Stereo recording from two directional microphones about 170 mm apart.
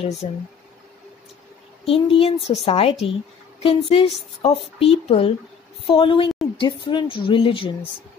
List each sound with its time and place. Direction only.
0.2 s speech: 50° left (ahead or behind)
1.9 s a child's voice: 35° left (ahead or behind)